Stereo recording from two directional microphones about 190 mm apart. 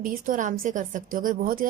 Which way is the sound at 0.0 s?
45° right (ahead or behind).